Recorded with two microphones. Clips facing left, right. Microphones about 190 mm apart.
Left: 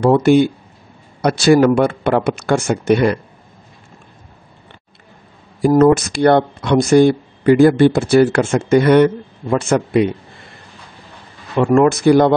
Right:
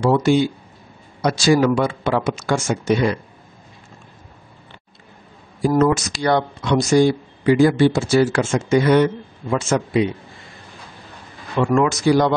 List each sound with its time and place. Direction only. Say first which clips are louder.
0.0 s speech: left 5 dB; 55° left (ahead or behind)
5.8 s speech: left 7 dB; 55° left (ahead or behind)
11.5 s speech: left 5 dB; 45° left (ahead or behind)